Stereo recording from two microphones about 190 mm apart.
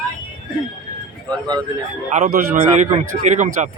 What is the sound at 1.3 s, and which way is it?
Speech, 20° right (ahead or behind).